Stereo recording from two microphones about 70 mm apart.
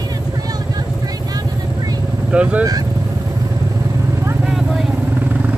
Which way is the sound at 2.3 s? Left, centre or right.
Centre.